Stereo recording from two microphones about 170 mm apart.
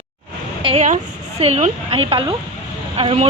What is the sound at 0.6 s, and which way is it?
A woman's voice, 40° right (ahead or behind).